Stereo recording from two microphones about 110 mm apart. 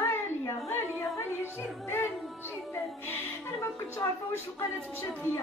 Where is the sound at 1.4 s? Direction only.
20° left (ahead or behind).